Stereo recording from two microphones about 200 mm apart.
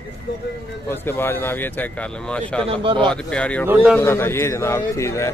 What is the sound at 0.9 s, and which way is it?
Speech, 10° left (ahead or behind).